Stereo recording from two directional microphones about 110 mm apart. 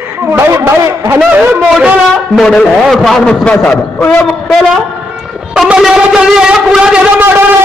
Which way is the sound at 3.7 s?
25° left (ahead or behind).